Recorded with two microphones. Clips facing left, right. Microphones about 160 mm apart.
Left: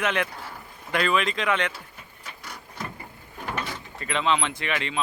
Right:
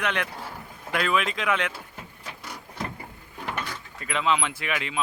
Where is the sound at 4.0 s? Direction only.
5° right (ahead or behind).